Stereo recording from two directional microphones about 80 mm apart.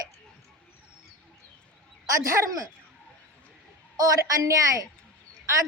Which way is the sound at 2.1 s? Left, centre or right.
Right.